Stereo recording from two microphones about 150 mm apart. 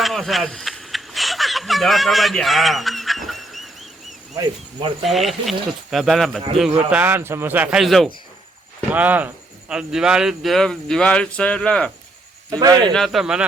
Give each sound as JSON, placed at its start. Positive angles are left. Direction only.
{"t": 0.0, "sound": "a sound", "side_deg": 0}
{"t": 5.0, "sound": "speech", "side_deg": 0}
{"t": 6.9, "sound": "speech", "side_deg": -15}
{"t": 8.9, "sound": "speech", "side_deg": -10}
{"t": 12.5, "sound": "speech", "side_deg": -25}
{"t": 12.9, "sound": "speech", "side_deg": 0}